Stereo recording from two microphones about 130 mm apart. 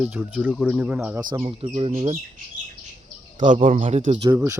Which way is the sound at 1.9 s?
65° right (ahead or behind).